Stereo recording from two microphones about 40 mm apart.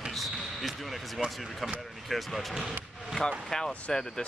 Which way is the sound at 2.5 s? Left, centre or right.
Centre.